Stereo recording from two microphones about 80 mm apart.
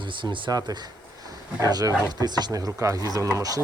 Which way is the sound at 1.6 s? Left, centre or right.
Right.